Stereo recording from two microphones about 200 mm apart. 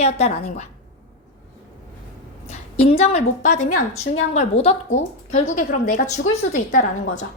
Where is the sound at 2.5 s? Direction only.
30° left (ahead or behind).